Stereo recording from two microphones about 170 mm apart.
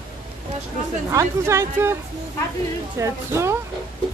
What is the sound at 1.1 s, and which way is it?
Speech, 15° right (ahead or behind).